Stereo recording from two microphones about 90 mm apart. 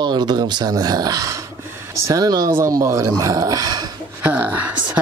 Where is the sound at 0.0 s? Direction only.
50° right (ahead or behind).